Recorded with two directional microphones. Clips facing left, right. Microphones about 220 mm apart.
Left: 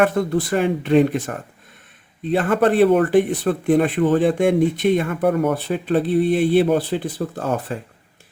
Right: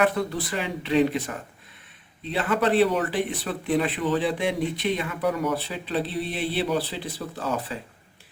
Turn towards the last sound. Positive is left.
turn(degrees=50)  # may be behind; listen again after turning